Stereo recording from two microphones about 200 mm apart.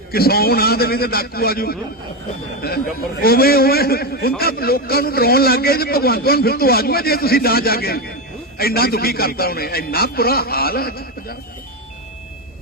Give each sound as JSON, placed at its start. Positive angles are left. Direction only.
{"t": 0.1, "sound": "a man's voice", "side_deg": 50}